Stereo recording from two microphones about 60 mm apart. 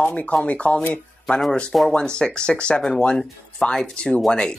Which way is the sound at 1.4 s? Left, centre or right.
Centre.